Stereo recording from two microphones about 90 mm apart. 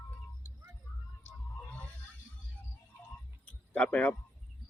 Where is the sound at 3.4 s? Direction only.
15° left (ahead or behind).